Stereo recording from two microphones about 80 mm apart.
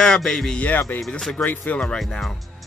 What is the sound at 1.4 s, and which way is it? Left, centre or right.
Speech, left.